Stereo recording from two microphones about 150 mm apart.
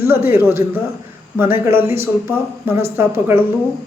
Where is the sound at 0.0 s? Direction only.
15° right (ahead or behind).